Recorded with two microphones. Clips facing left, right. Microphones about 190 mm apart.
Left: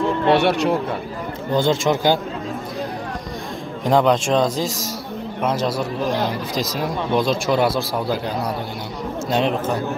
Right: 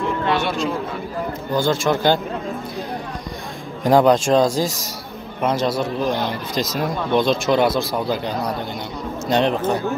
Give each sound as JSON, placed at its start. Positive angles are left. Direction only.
{"t": 0.4, "sound": "speech", "side_deg": 65}
{"t": 1.5, "sound": "speech", "side_deg": 20}
{"t": 3.8, "sound": "speech", "side_deg": 0}